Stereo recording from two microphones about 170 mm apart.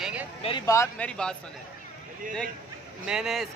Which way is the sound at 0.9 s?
5° left (ahead or behind).